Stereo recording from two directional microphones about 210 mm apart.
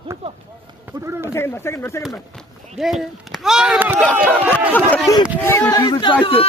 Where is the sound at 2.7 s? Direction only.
Centre (ahead or behind).